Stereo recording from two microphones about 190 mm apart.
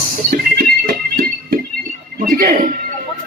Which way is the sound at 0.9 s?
45° right (ahead or behind).